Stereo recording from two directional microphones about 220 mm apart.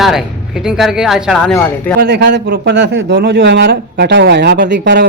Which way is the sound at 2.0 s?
50° right (ahead or behind).